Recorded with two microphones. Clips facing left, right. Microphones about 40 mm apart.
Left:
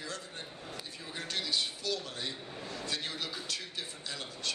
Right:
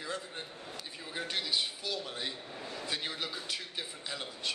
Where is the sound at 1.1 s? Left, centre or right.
Centre.